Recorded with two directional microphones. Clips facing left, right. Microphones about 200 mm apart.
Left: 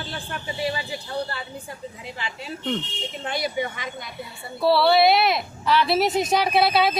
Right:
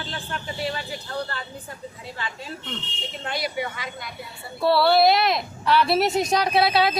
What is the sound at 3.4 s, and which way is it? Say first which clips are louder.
Speech: left 2 dB; 20° left (ahead or behind).